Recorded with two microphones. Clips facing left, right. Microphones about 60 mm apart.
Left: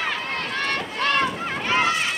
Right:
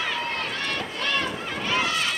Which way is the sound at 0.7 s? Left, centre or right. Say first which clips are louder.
Left 6 dB; left.